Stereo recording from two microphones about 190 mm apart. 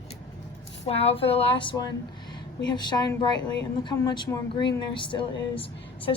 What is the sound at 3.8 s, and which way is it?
Speech, 20° left (ahead or behind).